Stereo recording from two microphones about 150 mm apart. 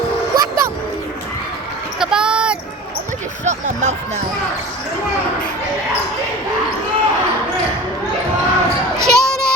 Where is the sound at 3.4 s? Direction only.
50° right (ahead or behind).